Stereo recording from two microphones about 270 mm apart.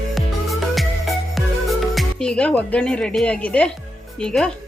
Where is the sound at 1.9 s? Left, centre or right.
Centre.